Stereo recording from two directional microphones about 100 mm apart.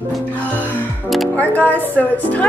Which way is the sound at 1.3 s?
15° left (ahead or behind).